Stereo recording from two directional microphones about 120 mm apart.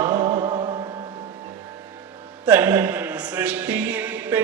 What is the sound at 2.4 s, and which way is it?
A man's voice, 15° right (ahead or behind).